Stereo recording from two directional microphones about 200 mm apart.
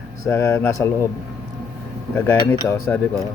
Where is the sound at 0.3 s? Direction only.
15° left (ahead or behind).